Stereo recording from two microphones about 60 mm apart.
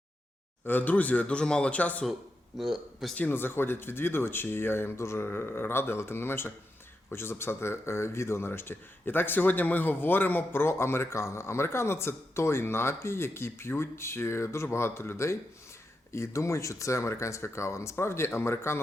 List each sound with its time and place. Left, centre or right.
0.6 s speech: left
2.6 s a man's voice: centre
3.2 s speech: left